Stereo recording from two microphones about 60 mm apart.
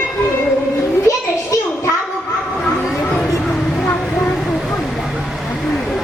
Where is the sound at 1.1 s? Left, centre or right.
Left.